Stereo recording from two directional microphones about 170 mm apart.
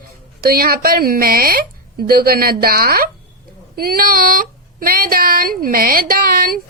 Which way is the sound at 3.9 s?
60° right (ahead or behind).